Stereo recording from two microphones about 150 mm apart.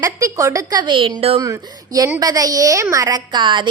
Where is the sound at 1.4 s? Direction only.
25° right (ahead or behind).